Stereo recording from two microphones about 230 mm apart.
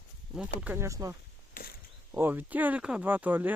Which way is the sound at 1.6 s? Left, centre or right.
Left.